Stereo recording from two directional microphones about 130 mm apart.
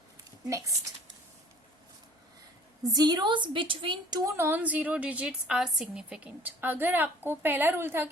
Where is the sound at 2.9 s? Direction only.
30° right (ahead or behind).